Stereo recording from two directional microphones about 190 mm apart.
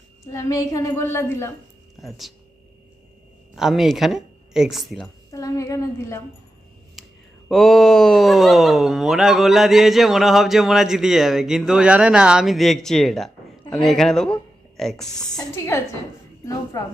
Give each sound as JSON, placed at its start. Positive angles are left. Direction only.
{"t": 0.3, "sound": "a woman's voice", "side_deg": 15}
{"t": 2.0, "sound": "speech", "side_deg": 0}
{"t": 3.5, "sound": "speech", "side_deg": 0}
{"t": 5.3, "sound": "a woman's voice", "side_deg": 15}
{"t": 7.0, "sound": "a sound", "side_deg": 0}
{"t": 7.4, "sound": "speech", "side_deg": 0}
{"t": 15.4, "sound": "a woman's voice", "side_deg": 15}